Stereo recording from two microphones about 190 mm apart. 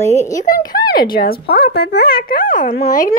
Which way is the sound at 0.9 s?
50° left (ahead or behind).